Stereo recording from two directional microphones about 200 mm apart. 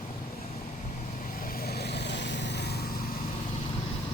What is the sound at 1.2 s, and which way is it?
Vehicle, 45° left (ahead or behind).